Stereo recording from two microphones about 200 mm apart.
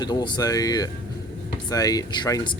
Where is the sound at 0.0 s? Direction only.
20° left (ahead or behind).